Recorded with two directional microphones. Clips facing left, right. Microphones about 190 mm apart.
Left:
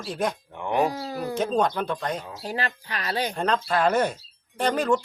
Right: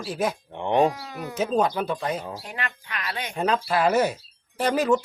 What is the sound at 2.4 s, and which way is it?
Speech, 35° left (ahead or behind).